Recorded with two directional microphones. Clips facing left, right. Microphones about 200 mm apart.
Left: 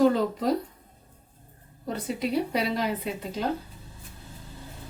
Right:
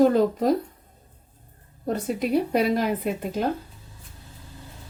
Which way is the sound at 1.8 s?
50° right (ahead or behind).